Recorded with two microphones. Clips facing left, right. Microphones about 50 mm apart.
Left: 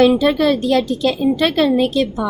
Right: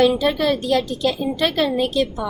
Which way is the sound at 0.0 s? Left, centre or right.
Left.